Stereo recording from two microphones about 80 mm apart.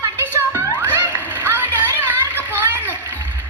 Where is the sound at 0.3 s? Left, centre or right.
Right.